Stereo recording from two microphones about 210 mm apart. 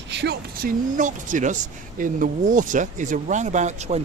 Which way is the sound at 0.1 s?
55° right (ahead or behind).